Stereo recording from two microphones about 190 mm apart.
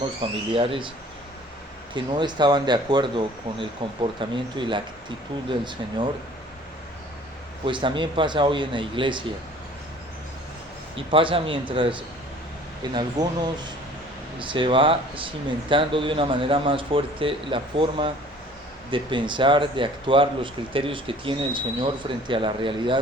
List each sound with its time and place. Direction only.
0.2 s speech: 30° right (ahead or behind)
1.9 s speech: 25° right (ahead or behind)
4.2 s speech: 25° right (ahead or behind)
7.6 s speech: 25° right (ahead or behind)
10.9 s speech: 25° right (ahead or behind)